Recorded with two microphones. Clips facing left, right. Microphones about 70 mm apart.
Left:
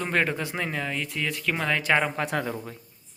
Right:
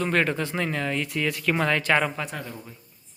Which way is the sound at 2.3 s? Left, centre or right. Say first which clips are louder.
Left 7 dB; left.